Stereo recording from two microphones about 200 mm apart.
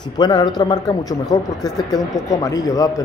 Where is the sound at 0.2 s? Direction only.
20° left (ahead or behind).